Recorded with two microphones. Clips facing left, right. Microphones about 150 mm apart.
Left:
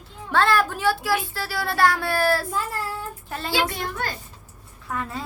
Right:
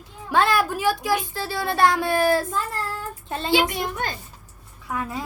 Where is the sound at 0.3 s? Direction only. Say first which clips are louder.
Even; 15° right (ahead or behind).